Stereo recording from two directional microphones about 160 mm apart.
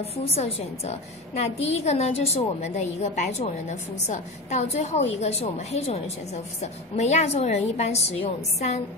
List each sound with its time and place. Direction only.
0.0 s a woman's voice: 40° left (ahead or behind)